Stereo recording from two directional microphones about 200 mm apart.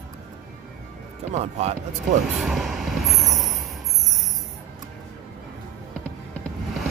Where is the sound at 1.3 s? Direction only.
35° right (ahead or behind).